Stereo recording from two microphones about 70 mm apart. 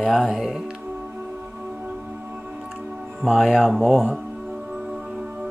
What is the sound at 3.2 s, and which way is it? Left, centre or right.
Speech, centre.